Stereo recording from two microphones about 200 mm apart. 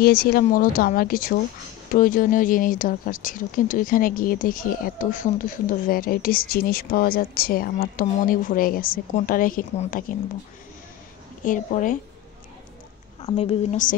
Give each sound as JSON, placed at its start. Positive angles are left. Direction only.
{"t": 0.0, "sound": "speech", "side_deg": 50}
{"t": 11.4, "sound": "speech", "side_deg": 40}
{"t": 13.2, "sound": "speech", "side_deg": 30}